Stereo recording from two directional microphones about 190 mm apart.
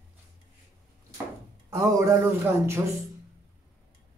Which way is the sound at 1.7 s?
15° right (ahead or behind).